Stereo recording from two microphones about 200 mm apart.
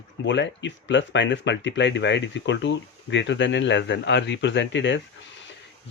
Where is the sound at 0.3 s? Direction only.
65° left (ahead or behind).